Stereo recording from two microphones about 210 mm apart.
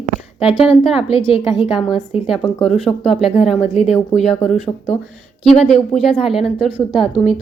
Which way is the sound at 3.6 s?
30° left (ahead or behind).